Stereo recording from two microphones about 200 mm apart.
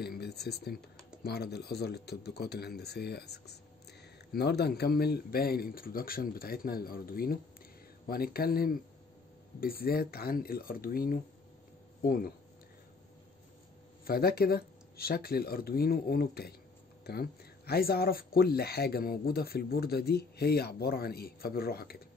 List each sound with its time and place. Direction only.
0.0 s speech: 55° left (ahead or behind)
14.0 s speech: 50° left (ahead or behind)